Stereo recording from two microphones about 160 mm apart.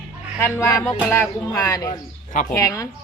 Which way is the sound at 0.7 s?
10° left (ahead or behind).